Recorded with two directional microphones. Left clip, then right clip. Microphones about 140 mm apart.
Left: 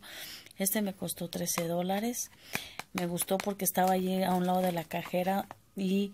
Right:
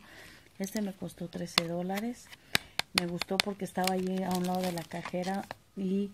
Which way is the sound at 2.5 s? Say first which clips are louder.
Right 9 dB; 30° right (ahead or behind).